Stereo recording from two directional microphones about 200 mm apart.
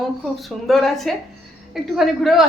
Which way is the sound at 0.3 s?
Centre (ahead or behind).